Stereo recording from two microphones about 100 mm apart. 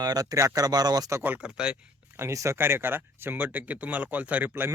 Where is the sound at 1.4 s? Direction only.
10° right (ahead or behind).